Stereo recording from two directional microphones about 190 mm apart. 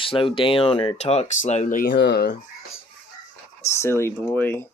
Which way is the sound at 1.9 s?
65° left (ahead or behind).